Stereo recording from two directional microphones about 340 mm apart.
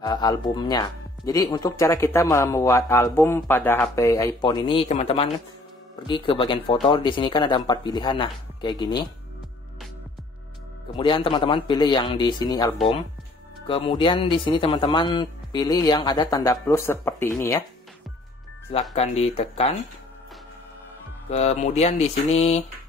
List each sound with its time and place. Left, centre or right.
0.0 s speech: centre
11.0 s speech: centre
18.7 s speech: centre
21.3 s speech: centre